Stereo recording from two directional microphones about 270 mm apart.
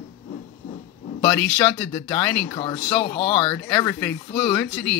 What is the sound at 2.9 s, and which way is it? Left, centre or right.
Speech, centre.